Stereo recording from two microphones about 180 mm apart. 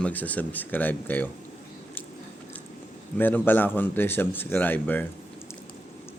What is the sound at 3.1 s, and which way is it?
Speech, 10° left (ahead or behind).